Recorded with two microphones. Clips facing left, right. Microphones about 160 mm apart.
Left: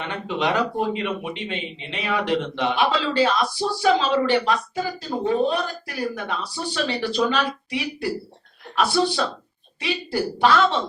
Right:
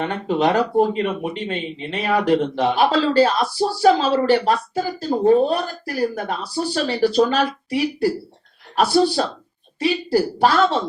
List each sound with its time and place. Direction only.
0.0 s speech: 40° right (ahead or behind)